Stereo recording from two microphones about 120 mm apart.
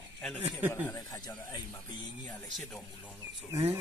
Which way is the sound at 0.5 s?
15° right (ahead or behind).